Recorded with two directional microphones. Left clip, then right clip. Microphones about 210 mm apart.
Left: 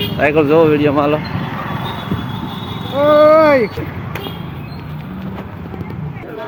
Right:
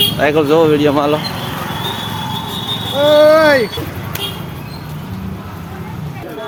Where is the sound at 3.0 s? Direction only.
25° left (ahead or behind).